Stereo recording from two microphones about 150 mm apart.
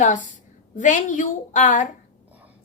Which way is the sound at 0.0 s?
55° left (ahead or behind).